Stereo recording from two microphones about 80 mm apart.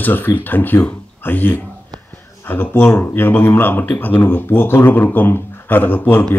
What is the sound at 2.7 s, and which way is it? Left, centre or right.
Speech, left.